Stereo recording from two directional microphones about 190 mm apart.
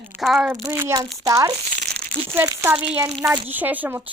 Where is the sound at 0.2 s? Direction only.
Centre (ahead or behind).